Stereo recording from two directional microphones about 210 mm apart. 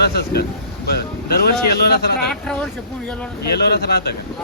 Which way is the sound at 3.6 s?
50° left (ahead or behind).